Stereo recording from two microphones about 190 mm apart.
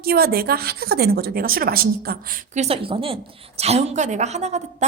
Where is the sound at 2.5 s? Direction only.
30° right (ahead or behind).